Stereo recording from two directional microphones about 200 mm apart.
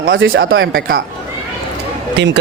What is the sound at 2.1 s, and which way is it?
Speech, 60° right (ahead or behind).